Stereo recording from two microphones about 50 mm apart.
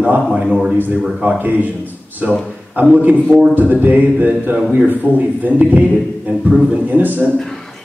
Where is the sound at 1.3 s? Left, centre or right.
Right.